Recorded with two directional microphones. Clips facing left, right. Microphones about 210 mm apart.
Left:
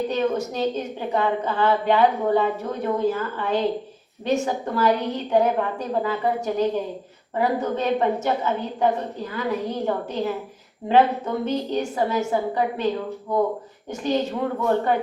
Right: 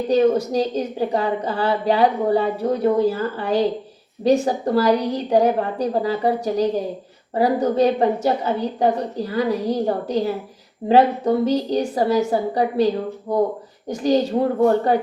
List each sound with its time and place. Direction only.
0.1 s a woman's voice: 35° right (ahead or behind)